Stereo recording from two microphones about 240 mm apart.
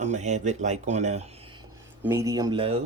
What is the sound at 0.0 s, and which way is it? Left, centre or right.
Speech, right.